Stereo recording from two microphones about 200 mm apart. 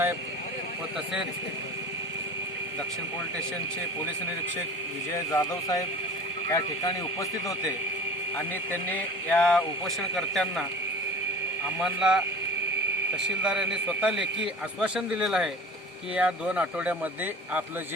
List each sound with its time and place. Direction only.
5.3 s a man's voice: 20° left (ahead or behind)
8.9 s a man's voice: 5° left (ahead or behind)
11.8 s a man's voice: 5° right (ahead or behind)
13.2 s a man's voice: 5° right (ahead or behind)